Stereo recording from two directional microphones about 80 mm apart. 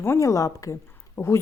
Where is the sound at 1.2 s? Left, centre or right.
Left.